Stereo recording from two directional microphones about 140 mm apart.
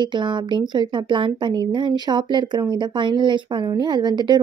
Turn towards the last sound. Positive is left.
turn(degrees=-30)  # may be behind; listen again after turning